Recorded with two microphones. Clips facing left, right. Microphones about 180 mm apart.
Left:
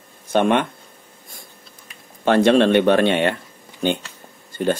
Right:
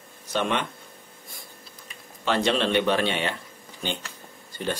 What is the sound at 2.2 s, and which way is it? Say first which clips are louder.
Speech: left 9 dB; 50° left (ahead or behind).